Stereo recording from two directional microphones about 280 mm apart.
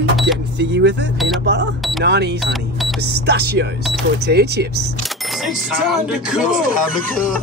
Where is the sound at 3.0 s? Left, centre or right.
Right.